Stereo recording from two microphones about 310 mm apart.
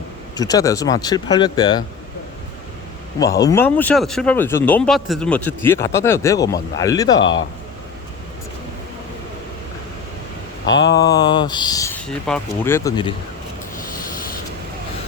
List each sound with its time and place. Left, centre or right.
0.3 s speech: centre
3.4 s speech: centre
10.7 s speech: centre
13.7 s a sound: left